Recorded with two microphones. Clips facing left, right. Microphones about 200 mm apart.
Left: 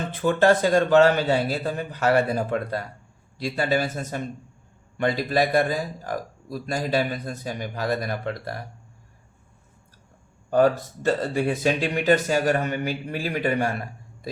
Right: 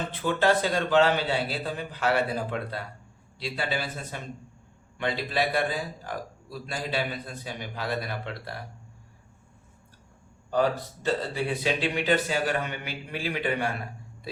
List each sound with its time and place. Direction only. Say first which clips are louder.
0.1 s a man's voice: left 6 dB; 45° left (ahead or behind)
10.5 s a man's voice: left 6 dB; 50° left (ahead or behind)